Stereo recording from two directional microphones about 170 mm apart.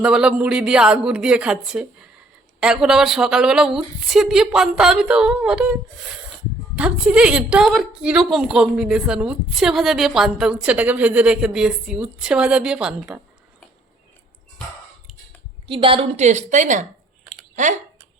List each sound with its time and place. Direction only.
0.0 s a woman's voice: 5° right (ahead or behind)
6.7 s a woman's voice: 5° right (ahead or behind)
15.6 s a woman's voice: 30° right (ahead or behind); by 16.8 s 45° right (ahead or behind)